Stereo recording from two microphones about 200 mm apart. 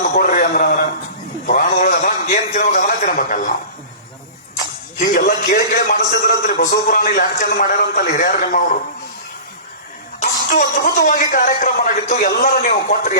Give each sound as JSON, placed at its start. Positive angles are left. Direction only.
{"t": 0.2, "sound": "a sound", "side_deg": 45}
{"t": 5.1, "sound": "a man's voice", "side_deg": 50}
{"t": 10.5, "sound": "a man's voice", "side_deg": 40}